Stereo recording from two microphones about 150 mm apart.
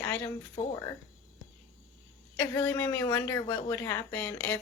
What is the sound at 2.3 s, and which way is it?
A woman's voice, 15° left (ahead or behind).